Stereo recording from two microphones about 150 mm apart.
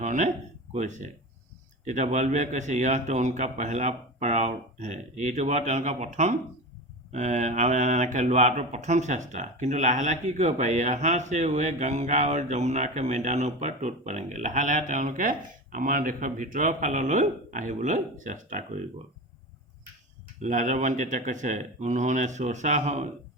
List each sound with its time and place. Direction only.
0.0 s a sound: 55° right (ahead or behind)
0.7 s speech: 55° right (ahead or behind)
20.4 s speech: 55° right (ahead or behind)